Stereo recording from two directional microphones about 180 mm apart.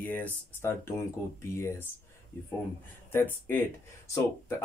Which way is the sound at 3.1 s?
10° left (ahead or behind).